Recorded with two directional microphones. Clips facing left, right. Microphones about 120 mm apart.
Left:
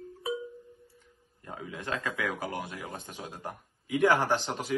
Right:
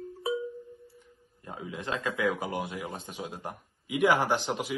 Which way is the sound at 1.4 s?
15° right (ahead or behind).